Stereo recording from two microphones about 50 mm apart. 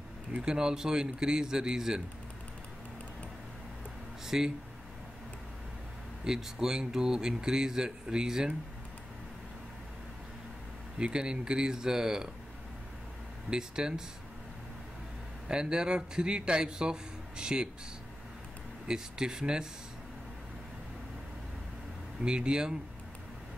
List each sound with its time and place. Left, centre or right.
0.4 s speech: centre
4.3 s speech: centre
6.2 s speech: centre
11.0 s speech: centre
13.5 s speech: centre
15.4 s speech: centre
18.9 s speech: centre
22.2 s speech: centre